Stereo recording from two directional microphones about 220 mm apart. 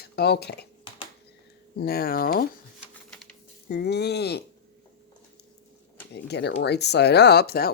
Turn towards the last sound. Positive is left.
turn(degrees=45)  # may be behind; listen again after turning